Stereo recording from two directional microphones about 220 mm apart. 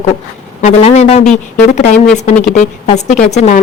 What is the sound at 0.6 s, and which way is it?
Speech, 30° left (ahead or behind).